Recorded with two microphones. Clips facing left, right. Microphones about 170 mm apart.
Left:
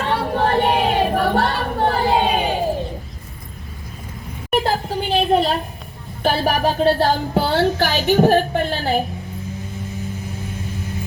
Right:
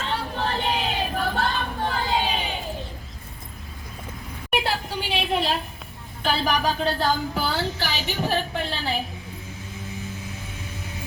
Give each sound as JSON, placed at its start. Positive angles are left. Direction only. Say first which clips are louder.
{"t": 0.0, "sound": "child singing", "louder": "left 8 dB", "side_deg": 60}
{"t": 4.5, "sound": "a sound", "louder": "left 6 dB", "side_deg": 45}
{"t": 6.2, "sound": "a woman's voice", "louder": "left 5 dB", "side_deg": 50}